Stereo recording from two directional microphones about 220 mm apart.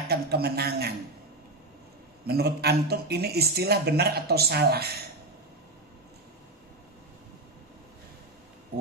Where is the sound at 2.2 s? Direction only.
45° right (ahead or behind).